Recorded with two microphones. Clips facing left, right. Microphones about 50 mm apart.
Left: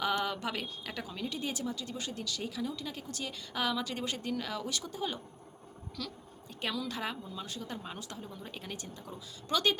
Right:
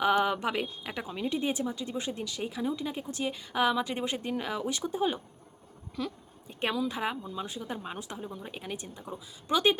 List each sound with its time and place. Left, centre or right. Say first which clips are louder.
0.0 s a woman's voice: right 6 dB; right